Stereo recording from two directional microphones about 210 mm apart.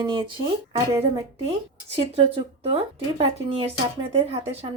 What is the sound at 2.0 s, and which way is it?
Speech, 25° right (ahead or behind).